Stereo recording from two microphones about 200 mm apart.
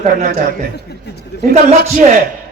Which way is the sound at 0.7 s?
55° left (ahead or behind).